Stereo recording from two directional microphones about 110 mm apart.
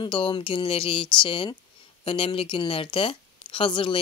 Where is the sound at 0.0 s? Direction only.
50° left (ahead or behind).